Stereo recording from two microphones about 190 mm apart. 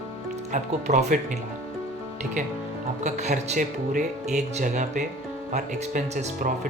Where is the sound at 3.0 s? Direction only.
40° right (ahead or behind).